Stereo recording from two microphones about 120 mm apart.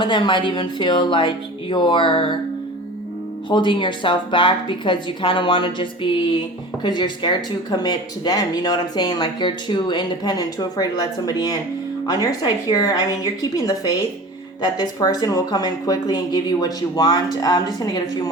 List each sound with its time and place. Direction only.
0.0 s a woman's voice: 40° left (ahead or behind)
3.5 s a woman's voice: 40° left (ahead or behind)